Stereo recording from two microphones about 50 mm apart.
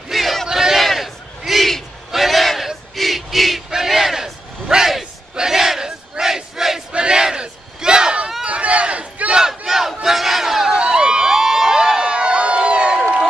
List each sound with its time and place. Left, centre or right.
0.1 s battle cry: centre
0.5 s battle cry: centre
2.1 s a sound: centre
3.7 s battle cry: centre; by 9.4 s right
9.4 s battle cry: centre
10.8 s crowd: centre